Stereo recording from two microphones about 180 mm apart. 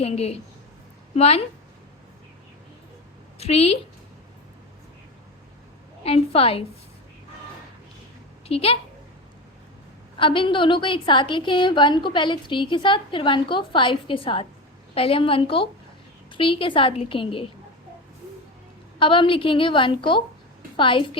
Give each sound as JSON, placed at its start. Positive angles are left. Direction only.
{"t": 0.0, "sound": "a woman's voice", "side_deg": 35}
{"t": 3.3, "sound": "a woman's voice", "side_deg": 35}
{"t": 6.0, "sound": "a woman's voice", "side_deg": 35}
{"t": 8.4, "sound": "a woman's voice", "side_deg": 35}
{"t": 10.2, "sound": "a woman's voice", "side_deg": 30}
{"t": 18.9, "sound": "a woman's voice", "side_deg": 30}